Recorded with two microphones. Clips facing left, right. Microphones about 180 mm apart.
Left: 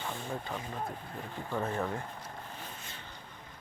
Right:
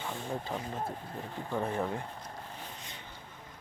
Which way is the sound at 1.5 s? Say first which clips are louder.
Right 1 dB; 15° right (ahead or behind).